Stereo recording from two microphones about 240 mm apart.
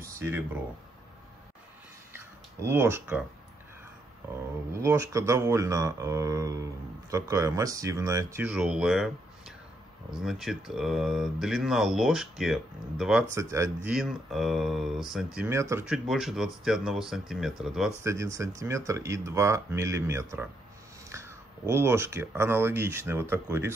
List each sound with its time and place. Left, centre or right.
0.0 s a sound: centre
2.1 s a sound: centre
4.3 s speech: centre
10.2 s speech: centre
13.8 s speech: centre
18.0 s speech: centre